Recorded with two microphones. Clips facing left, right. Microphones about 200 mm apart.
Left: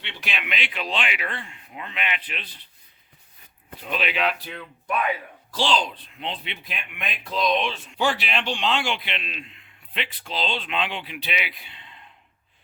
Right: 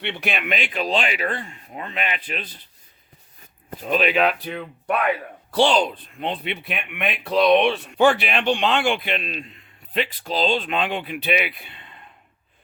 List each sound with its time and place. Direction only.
0.0 s speech: 60° right (ahead or behind); by 2.6 s 45° right (ahead or behind)
3.7 s speech: 45° right (ahead or behind)